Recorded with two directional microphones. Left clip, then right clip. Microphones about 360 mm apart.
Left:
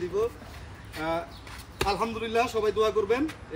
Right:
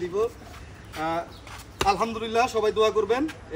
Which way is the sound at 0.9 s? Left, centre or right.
Centre.